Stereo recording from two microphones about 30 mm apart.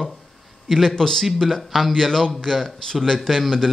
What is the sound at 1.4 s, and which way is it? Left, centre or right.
Speech, centre.